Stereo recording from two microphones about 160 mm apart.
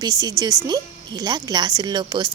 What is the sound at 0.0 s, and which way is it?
A woman's voice, 25° right (ahead or behind).